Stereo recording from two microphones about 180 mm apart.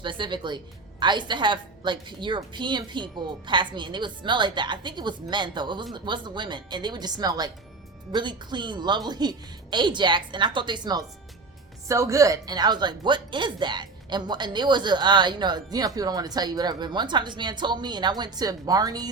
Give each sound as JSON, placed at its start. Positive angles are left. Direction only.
{"t": 0.0, "sound": "speech", "side_deg": -25}